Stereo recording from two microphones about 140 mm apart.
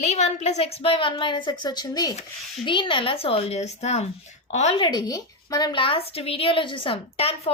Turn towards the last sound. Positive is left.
turn(degrees=45)  # may be behind; listen again after turning